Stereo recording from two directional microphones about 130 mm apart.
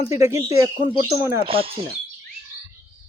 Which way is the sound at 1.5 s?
45° right (ahead or behind).